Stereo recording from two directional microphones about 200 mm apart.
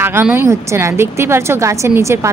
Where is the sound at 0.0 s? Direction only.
10° right (ahead or behind).